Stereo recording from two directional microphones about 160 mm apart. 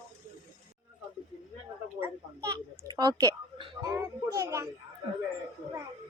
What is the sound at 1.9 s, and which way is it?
Speech, 15° right (ahead or behind).